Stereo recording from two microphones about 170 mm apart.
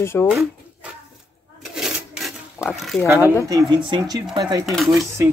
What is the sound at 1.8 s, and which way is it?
Filing, centre (ahead or behind).